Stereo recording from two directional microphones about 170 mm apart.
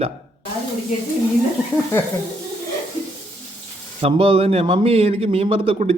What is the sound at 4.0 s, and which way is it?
Speech, 35° right (ahead or behind).